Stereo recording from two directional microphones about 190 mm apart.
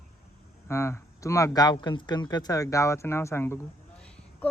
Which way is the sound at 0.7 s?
15° left (ahead or behind).